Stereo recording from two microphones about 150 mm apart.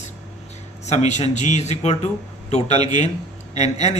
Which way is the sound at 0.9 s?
50° left (ahead or behind).